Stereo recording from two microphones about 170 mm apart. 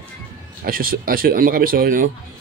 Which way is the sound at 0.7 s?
60° right (ahead or behind).